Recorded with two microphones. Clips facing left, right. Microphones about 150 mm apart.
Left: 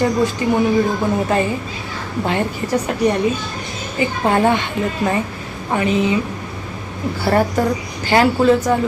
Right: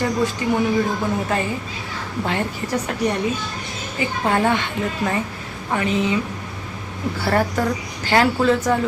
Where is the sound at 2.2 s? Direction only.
20° left (ahead or behind).